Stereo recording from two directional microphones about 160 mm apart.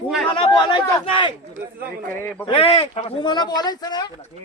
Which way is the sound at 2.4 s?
35° left (ahead or behind).